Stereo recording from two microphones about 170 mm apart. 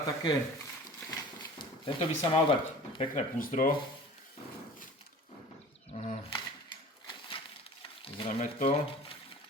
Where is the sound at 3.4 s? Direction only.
55° left (ahead or behind).